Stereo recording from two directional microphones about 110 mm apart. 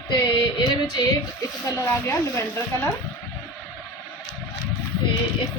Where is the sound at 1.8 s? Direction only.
25° left (ahead or behind).